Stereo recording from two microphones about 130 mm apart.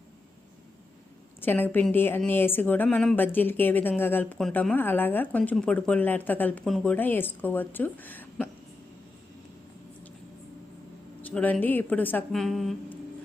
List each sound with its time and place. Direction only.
1.4 s a woman's voice: 15° left (ahead or behind)
6.7 s a woman's voice: centre (ahead or behind)
6.9 s a woman's voice: 15° left (ahead or behind)
11.2 s a woman's voice: 10° left (ahead or behind)
12.3 s a woman's voice: centre (ahead or behind)